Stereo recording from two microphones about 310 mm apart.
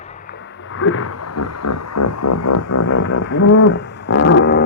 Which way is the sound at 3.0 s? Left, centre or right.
Left.